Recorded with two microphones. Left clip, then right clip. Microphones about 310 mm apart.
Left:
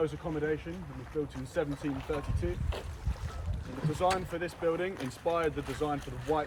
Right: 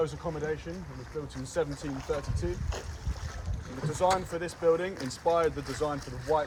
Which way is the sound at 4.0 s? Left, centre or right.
Centre.